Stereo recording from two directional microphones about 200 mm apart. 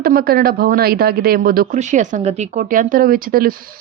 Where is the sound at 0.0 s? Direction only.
50° right (ahead or behind).